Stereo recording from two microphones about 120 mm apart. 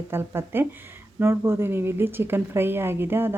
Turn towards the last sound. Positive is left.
turn(degrees=-20)  # may be behind; listen again after turning